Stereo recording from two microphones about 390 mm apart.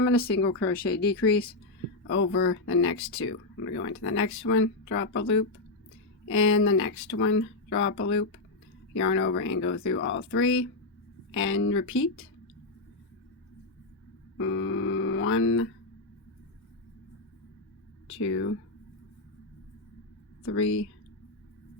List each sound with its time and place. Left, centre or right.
0.0 s speech: left
14.3 s a sound: left
20.4 s speech: left